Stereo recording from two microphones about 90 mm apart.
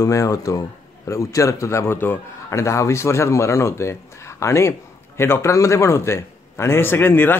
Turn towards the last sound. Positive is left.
turn(degrees=25)  # may be behind; listen again after turning